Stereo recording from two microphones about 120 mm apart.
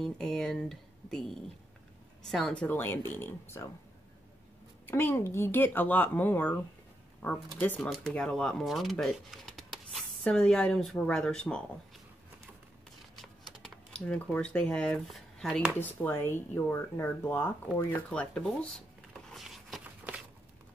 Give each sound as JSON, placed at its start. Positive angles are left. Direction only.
{"t": 0.0, "sound": "speech", "side_deg": 5}
{"t": 2.6, "sound": "speech", "side_deg": 15}
{"t": 4.8, "sound": "speech", "side_deg": 20}
{"t": 13.1, "sound": "typing", "side_deg": 0}
{"t": 15.8, "sound": "speech", "side_deg": 15}
{"t": 19.2, "sound": "a sound", "side_deg": 0}